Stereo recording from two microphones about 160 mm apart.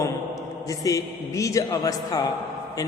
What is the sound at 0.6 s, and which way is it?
A man's voice, 20° left (ahead or behind).